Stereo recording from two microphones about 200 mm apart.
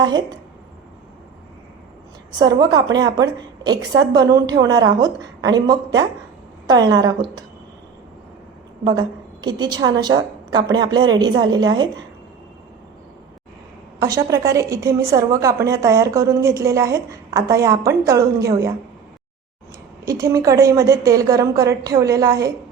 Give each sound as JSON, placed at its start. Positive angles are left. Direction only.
{"t": 0.0, "sound": "a woman's voice", "side_deg": -20}
{"t": 2.4, "sound": "a woman's voice", "side_deg": -20}
{"t": 8.8, "sound": "a woman's voice", "side_deg": -20}
{"t": 14.0, "sound": "a woman's voice", "side_deg": -15}
{"t": 20.1, "sound": "a woman's voice", "side_deg": -15}